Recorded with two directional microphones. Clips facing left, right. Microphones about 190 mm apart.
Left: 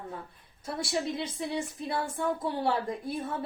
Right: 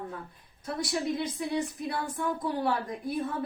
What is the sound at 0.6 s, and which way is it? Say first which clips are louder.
A woman's voice: right 1 dB; 25° left (ahead or behind).